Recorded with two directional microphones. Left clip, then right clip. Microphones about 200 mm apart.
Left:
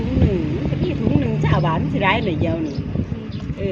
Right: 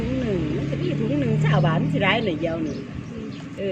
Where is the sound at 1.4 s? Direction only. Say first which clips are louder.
Left 2 dB; 25° left (ahead or behind).